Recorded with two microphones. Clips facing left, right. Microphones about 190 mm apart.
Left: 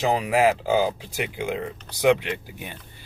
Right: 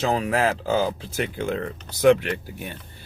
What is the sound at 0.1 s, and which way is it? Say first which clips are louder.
Speech: left 2 dB; 15° left (ahead or behind).